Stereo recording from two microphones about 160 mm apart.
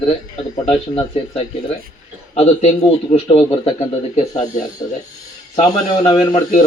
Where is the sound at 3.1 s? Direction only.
35° left (ahead or behind).